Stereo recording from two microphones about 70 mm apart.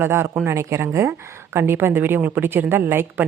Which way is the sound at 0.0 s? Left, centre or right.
Right.